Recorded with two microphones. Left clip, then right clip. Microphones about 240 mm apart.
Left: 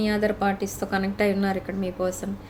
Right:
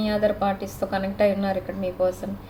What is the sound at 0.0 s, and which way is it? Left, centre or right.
A woman's voice, left.